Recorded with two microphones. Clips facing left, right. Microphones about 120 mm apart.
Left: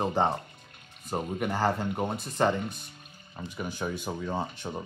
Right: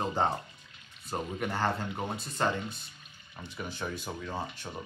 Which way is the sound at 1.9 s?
50° left (ahead or behind).